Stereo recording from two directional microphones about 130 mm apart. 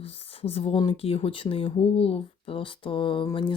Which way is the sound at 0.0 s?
45° left (ahead or behind).